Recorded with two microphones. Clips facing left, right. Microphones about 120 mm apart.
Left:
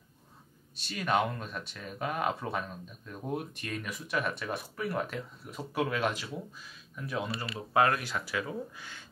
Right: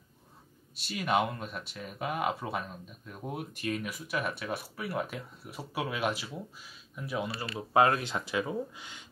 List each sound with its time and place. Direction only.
0.8 s speech: 10° right (ahead or behind)